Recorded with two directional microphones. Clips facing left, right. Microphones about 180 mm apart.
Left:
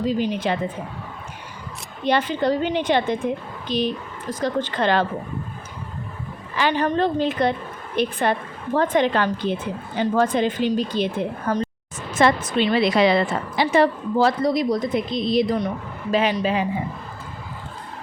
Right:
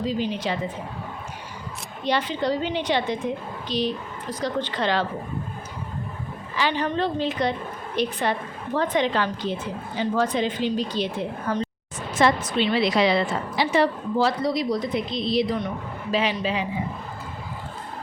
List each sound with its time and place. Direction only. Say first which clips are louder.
0.2 s a woman's voice: left 3 dB; 50° left (ahead or behind)
2.0 s a woman's voice: left 4 dB; 55° left (ahead or behind)
6.6 s a woman's voice: left 4 dB; 50° left (ahead or behind)